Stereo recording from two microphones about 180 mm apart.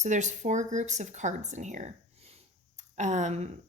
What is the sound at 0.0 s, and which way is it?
Speech, 40° right (ahead or behind).